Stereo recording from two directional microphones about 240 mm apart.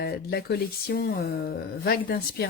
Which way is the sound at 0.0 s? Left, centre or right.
Left.